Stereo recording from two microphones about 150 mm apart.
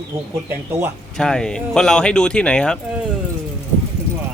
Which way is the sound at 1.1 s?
5° left (ahead or behind).